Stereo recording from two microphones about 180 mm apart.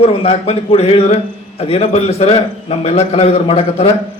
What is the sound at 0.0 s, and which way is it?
A man's voice, 35° left (ahead or behind).